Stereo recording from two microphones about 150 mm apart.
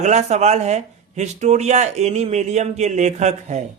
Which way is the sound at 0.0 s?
50° right (ahead or behind).